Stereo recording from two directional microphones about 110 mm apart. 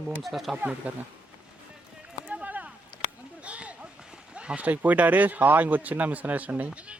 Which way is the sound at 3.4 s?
10° right (ahead or behind).